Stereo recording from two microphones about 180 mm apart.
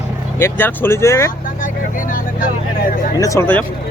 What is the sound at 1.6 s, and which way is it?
Vehicle, 45° left (ahead or behind).